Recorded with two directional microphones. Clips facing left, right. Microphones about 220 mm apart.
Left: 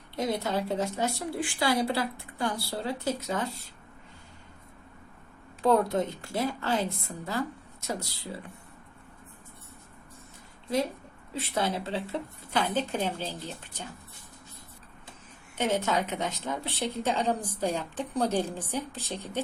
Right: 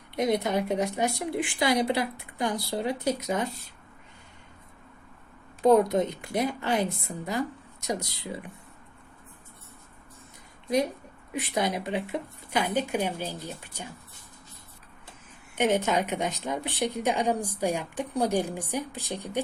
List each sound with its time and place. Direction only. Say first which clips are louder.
0.2 s a woman's voice: right 4 dB; 20° right (ahead or behind)
5.6 s a woman's voice: right 4 dB; 20° right (ahead or behind)
11.3 s a woman's voice: right 2 dB; 15° right (ahead or behind)
15.5 s a woman's voice: right 3 dB; 20° right (ahead or behind)